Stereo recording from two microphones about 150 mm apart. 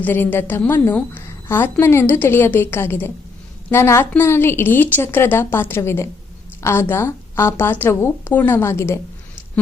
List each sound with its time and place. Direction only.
0.0 s a woman's voice: 15° left (ahead or behind)